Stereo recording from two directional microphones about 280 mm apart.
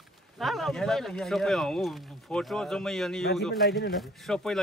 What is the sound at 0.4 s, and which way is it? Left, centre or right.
Speech, centre.